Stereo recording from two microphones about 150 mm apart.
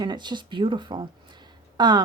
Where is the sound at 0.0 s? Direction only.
30° right (ahead or behind).